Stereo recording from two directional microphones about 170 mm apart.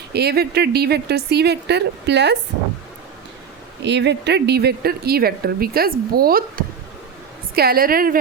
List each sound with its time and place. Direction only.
0.1 s speech: 70° right (ahead or behind); by 2.4 s 85° right
3.8 s speech: 90° right; by 8.2 s 60° right (ahead or behind)